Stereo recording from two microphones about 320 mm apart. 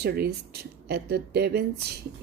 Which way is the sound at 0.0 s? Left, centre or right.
Right.